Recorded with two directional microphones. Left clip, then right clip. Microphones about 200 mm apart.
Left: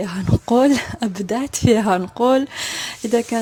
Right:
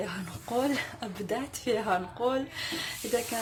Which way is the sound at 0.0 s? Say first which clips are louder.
Left 12 dB; 50° left (ahead or behind).